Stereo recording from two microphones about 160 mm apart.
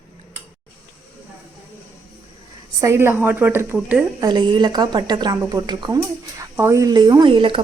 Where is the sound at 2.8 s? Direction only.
15° right (ahead or behind).